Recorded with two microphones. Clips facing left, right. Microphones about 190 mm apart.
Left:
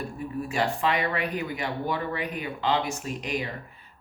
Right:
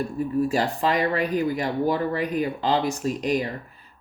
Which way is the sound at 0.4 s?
35° right (ahead or behind).